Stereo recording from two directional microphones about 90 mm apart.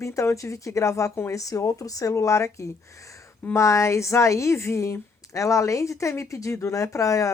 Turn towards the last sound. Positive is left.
turn(degrees=40)  # may be behind; listen again after turning